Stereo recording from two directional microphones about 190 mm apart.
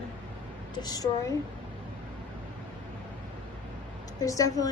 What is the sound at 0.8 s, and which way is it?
Speech, 20° left (ahead or behind).